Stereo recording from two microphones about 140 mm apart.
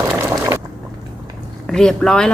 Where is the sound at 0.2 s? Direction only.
20° right (ahead or behind).